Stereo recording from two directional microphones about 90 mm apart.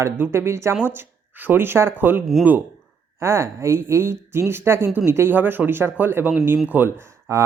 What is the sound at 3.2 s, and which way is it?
A woman's voice, 30° right (ahead or behind).